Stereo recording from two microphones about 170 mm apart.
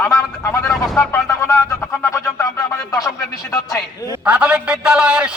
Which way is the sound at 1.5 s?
15° left (ahead or behind).